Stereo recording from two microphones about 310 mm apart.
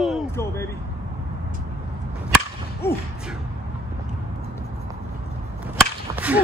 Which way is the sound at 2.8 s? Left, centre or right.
Centre.